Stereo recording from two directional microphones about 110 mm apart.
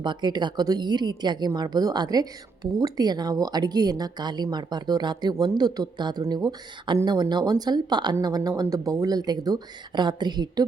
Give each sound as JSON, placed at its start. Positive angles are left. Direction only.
{"t": 0.0, "sound": "speech", "side_deg": -45}